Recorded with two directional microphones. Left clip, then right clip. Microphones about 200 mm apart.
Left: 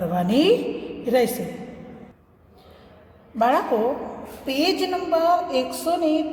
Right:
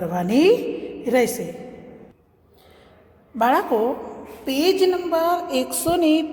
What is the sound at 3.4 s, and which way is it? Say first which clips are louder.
A woman's voice: right 1 dB; 30° right (ahead or behind).